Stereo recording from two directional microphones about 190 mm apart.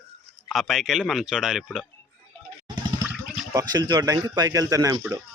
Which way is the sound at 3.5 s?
20° right (ahead or behind).